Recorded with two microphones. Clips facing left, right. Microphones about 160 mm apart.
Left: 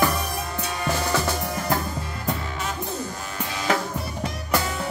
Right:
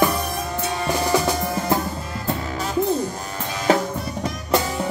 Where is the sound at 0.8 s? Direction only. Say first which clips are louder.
Right 4 dB; 15° right (ahead or behind).